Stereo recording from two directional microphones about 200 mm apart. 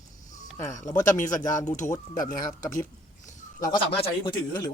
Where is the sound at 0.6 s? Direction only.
40° left (ahead or behind).